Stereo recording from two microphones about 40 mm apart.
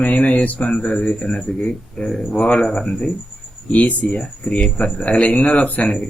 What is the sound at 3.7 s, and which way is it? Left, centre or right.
Speech, left.